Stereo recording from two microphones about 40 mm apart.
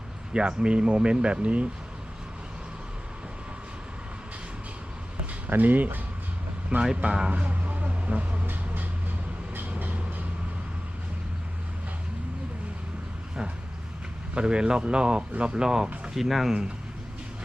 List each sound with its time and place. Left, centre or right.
0.3 s speech: right
5.5 s speech: right
7.3 s a sound: right
7.9 s vehicle: right
8.4 s vehicle: right
9.6 s train: right
14.3 s speech: right
16.1 s speech: centre